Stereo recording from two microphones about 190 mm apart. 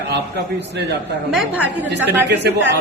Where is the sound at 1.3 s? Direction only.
5° right (ahead or behind).